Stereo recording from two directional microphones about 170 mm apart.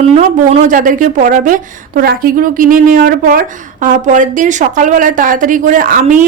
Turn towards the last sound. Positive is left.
turn(degrees=-55)  # may be behind; listen again after turning